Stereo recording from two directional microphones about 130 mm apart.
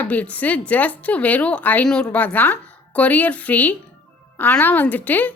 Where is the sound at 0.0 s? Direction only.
10° left (ahead or behind).